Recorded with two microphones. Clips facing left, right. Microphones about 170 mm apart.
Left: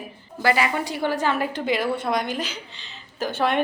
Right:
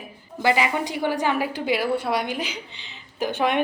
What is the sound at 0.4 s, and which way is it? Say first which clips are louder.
A woman's voice: even; 20° right (ahead or behind).